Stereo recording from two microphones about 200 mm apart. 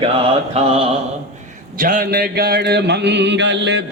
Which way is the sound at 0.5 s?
30° right (ahead or behind).